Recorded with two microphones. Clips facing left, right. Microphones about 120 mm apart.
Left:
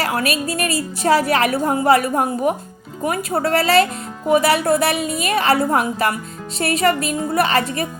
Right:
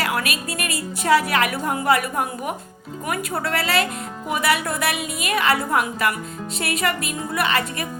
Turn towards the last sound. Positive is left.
turn(degrees=35)  # may be behind; listen again after turning